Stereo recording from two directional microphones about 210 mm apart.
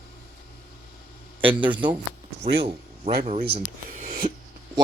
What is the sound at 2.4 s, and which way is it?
Speech, 30° right (ahead or behind).